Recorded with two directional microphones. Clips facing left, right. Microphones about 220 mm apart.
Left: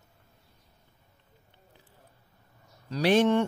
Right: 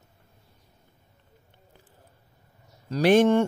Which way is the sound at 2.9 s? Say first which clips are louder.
Right 4 dB; 50° right (ahead or behind).